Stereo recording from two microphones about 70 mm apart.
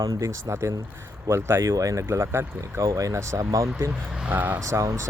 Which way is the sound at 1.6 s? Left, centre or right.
Right.